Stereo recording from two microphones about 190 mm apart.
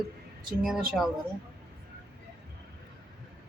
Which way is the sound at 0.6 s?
Centre (ahead or behind).